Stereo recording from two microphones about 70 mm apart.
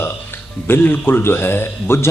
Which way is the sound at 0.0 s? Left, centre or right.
Left.